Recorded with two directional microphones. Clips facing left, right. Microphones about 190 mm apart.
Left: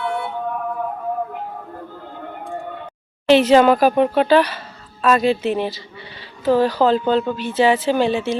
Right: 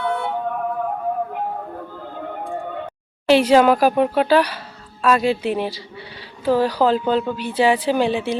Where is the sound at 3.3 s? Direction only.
10° right (ahead or behind).